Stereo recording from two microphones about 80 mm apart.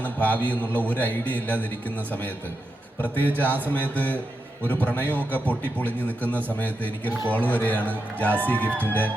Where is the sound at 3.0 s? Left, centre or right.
Left.